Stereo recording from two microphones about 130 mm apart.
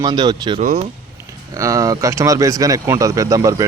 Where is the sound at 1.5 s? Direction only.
25° right (ahead or behind).